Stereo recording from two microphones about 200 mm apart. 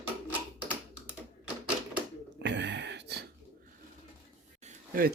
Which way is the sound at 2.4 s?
60° right (ahead or behind).